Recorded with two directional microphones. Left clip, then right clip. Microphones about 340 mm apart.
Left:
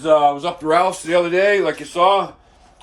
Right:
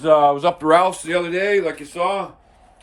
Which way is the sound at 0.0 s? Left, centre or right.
Right.